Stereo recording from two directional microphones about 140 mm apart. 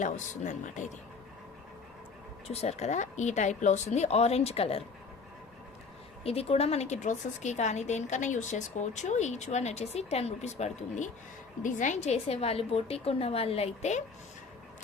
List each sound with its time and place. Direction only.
0.0 s a woman's voice: 60° left (ahead or behind)
2.5 s a woman's voice: 50° left (ahead or behind)
6.2 s a woman's voice: 45° left (ahead or behind)